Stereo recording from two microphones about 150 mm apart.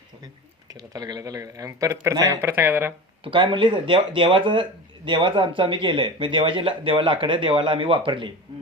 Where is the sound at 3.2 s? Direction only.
35° right (ahead or behind).